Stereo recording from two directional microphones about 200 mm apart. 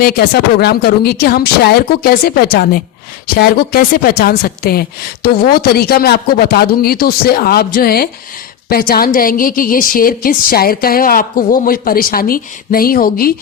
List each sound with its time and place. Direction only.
0.0 s a woman's voice: 50° left (ahead or behind)